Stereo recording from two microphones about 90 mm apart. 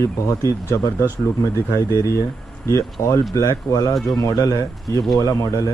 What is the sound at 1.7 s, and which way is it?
Speech, 35° left (ahead or behind).